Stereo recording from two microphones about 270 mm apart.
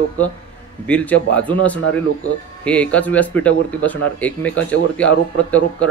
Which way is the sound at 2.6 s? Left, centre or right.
Centre.